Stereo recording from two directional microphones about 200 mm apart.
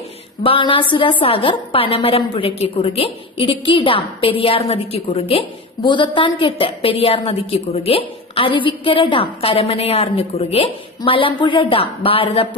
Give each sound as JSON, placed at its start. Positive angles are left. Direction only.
{"t": 0.4, "sound": "a woman's voice", "side_deg": 25}